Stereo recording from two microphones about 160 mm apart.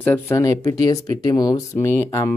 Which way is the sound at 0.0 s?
15° left (ahead or behind).